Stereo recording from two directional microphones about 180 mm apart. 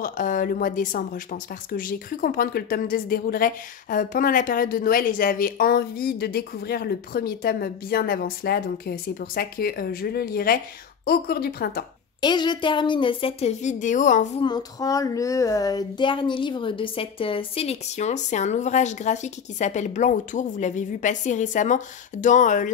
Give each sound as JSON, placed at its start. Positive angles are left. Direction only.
{"t": 0.0, "sound": "speech", "side_deg": 50}
{"t": 12.2, "sound": "speech", "side_deg": 25}
{"t": 14.4, "sound": "speech", "side_deg": 20}